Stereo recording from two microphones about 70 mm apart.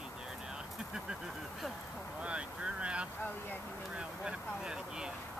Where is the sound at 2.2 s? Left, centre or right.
Centre.